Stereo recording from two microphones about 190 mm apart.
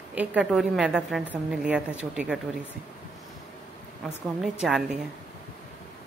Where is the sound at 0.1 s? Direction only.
5° right (ahead or behind).